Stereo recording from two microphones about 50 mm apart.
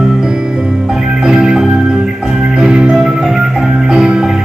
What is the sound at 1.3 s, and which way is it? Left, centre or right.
Music, centre.